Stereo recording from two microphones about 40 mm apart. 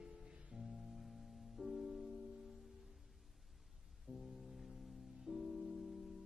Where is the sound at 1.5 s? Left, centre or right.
Centre.